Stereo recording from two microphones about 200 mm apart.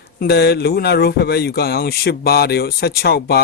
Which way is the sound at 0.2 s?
55° left (ahead or behind).